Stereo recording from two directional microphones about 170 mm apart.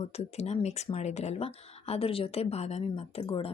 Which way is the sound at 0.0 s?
35° left (ahead or behind).